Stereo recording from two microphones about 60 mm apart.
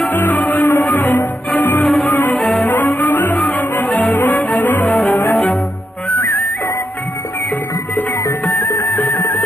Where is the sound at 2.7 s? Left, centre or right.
Left.